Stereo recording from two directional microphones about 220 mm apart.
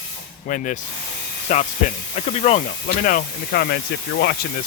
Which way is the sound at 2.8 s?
40° left (ahead or behind).